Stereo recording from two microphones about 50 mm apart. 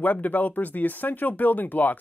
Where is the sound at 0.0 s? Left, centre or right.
Left.